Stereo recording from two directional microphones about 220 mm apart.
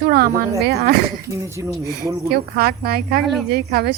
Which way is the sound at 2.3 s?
45° right (ahead or behind).